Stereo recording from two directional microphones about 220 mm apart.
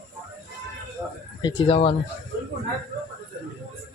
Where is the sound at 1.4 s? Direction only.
20° left (ahead or behind).